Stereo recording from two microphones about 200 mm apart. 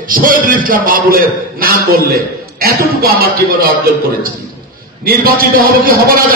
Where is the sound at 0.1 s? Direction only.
45° right (ahead or behind).